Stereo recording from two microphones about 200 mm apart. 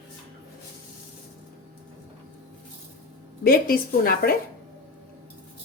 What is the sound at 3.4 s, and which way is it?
Speech, 45° left (ahead or behind).